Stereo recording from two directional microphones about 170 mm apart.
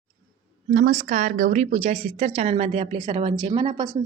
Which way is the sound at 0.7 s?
55° right (ahead or behind).